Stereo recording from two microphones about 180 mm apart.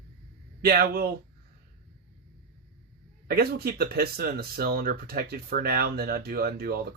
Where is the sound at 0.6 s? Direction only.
60° right (ahead or behind).